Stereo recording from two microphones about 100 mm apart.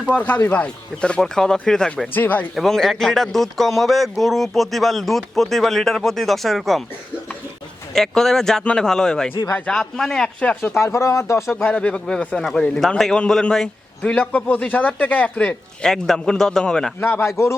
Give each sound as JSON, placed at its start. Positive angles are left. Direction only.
{"t": 0.4, "sound": "a man's voice", "side_deg": 15}
{"t": 2.1, "sound": "a man's voice", "side_deg": 15}
{"t": 2.6, "sound": "speech", "side_deg": 5}
{"t": 7.9, "sound": "speech", "side_deg": 5}
{"t": 9.5, "sound": "a man's voice", "side_deg": 15}
{"t": 9.7, "sound": "speech", "side_deg": 5}
{"t": 11.6, "sound": "a man's voice", "side_deg": 15}
{"t": 17.0, "sound": "speech", "side_deg": 20}